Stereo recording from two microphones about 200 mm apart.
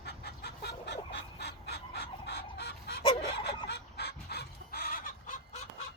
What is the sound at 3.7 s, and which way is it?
Chicken, 55° left (ahead or behind).